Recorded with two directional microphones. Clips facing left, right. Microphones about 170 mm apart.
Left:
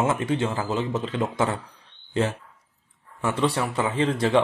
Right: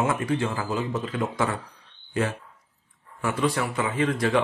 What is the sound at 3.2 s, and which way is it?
A man's voice, 25° left (ahead or behind).